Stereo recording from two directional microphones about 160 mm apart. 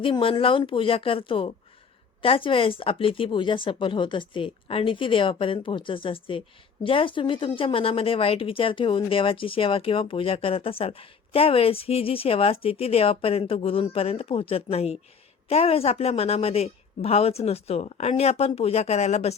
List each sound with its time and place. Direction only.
0.0 s speech: 35° left (ahead or behind)